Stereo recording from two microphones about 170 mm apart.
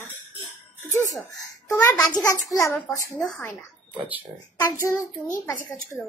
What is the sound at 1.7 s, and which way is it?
A child's voice, 15° left (ahead or behind).